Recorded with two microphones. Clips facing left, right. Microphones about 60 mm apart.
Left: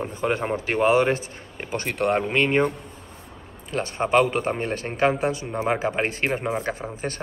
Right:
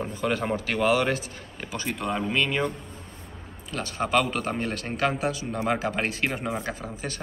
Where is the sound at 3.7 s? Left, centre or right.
Left.